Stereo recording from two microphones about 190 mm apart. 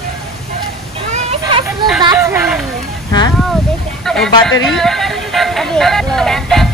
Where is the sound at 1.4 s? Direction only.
25° right (ahead or behind).